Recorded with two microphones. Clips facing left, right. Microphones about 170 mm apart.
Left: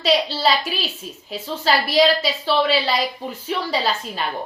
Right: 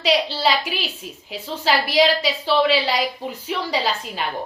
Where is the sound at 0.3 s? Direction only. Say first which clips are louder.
Left 1 dB; 15° right (ahead or behind).